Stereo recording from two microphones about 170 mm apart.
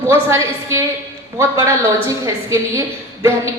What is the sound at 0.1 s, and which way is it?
A woman's voice, 15° right (ahead or behind).